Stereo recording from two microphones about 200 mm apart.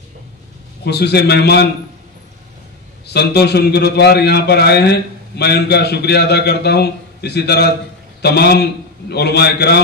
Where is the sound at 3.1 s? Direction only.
55° left (ahead or behind).